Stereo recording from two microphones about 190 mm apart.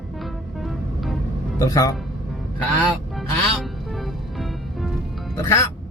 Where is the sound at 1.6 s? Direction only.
20° left (ahead or behind).